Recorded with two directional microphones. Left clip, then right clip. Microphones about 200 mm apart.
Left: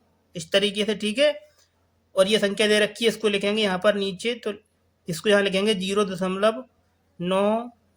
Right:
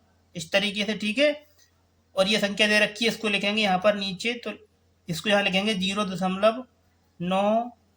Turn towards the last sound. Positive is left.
turn(degrees=25)  # may be behind; listen again after turning